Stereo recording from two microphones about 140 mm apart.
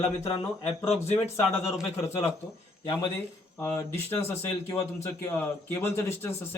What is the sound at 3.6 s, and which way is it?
A man's voice, 20° left (ahead or behind).